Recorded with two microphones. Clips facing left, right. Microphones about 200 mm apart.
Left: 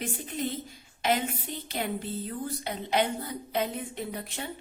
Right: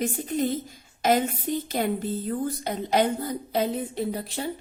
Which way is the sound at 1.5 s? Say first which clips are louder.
Right 7 dB; 45° right (ahead or behind).